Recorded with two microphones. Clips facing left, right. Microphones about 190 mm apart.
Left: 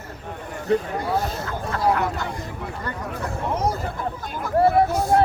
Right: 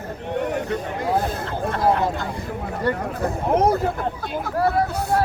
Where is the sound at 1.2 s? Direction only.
55° right (ahead or behind).